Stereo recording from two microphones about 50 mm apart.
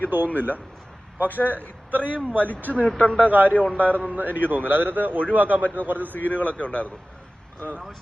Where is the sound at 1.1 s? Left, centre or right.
Right.